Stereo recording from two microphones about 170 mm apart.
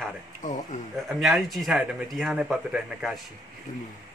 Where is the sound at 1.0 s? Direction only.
Centre (ahead or behind).